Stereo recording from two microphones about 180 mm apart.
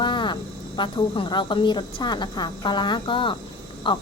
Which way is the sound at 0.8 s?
25° left (ahead or behind).